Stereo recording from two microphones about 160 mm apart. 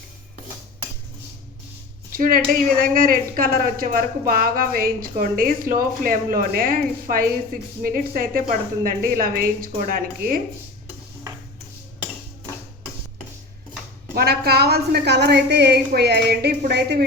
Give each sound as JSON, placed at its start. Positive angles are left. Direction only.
{"t": 2.1, "sound": "speech", "side_deg": -60}
{"t": 14.2, "sound": "a woman's voice", "side_deg": -75}